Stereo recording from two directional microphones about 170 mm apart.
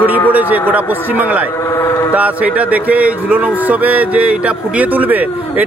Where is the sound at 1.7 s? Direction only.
15° left (ahead or behind).